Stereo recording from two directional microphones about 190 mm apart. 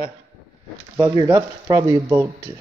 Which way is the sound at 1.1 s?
20° right (ahead or behind).